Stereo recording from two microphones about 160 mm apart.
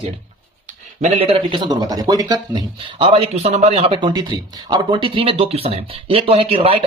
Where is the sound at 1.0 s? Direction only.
35° right (ahead or behind).